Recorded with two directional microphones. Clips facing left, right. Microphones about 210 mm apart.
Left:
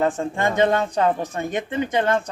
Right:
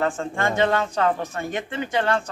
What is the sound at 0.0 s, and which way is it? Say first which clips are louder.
Speech: left 3 dB; 20° left (ahead or behind).